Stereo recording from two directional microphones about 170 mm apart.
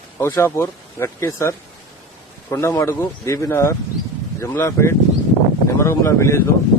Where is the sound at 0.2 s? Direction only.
15° left (ahead or behind).